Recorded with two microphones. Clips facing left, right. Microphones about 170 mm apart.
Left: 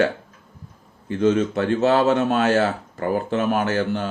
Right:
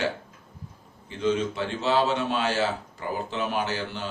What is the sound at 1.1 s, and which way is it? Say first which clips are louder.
Speech: left 7 dB; 50° left (ahead or behind).